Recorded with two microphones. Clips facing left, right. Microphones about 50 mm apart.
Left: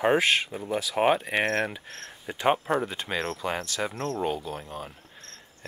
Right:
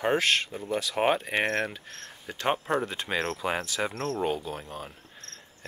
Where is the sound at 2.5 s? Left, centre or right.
Centre.